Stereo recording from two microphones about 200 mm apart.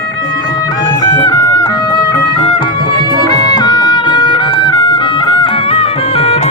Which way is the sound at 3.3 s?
20° left (ahead or behind).